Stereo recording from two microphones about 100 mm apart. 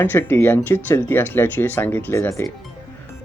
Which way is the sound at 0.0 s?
20° left (ahead or behind).